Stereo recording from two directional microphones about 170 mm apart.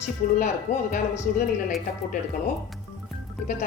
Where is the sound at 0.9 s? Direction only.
45° left (ahead or behind).